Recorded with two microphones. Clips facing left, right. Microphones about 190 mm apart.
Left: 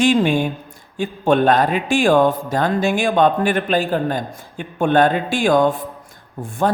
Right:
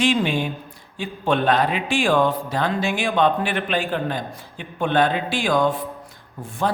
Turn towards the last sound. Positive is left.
turn(degrees=50)  # may be behind; listen again after turning